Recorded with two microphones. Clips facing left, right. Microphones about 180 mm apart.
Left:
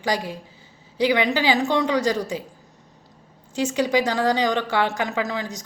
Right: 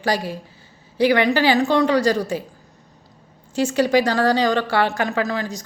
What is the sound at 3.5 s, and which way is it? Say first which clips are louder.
A woman's voice: right 3 dB; 15° left (ahead or behind).